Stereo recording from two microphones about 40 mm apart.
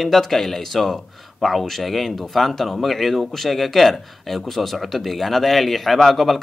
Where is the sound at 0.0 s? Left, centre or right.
Centre.